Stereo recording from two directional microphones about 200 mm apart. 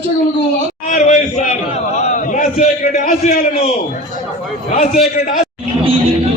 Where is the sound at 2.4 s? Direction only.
35° left (ahead or behind).